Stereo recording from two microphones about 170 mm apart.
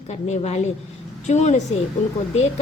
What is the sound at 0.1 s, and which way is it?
A woman's voice, 40° left (ahead or behind).